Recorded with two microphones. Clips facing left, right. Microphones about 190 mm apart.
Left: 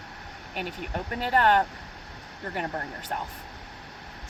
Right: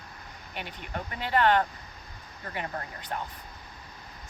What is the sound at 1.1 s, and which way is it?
Speech, 45° left (ahead or behind).